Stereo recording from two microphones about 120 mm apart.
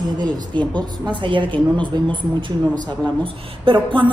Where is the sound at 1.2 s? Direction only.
40° right (ahead or behind).